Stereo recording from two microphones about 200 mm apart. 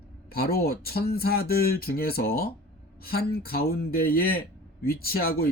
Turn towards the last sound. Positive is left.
turn(degrees=50)  # may be behind; listen again after turning